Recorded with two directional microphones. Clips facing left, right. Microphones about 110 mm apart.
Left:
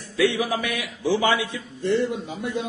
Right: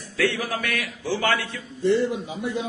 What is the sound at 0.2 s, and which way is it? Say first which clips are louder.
A man's voice: left 3 dB; 15° left (ahead or behind).